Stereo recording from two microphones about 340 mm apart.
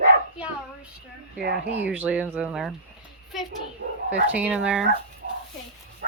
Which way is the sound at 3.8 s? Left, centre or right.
Right.